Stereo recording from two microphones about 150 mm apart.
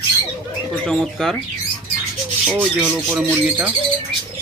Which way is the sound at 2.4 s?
10° right (ahead or behind).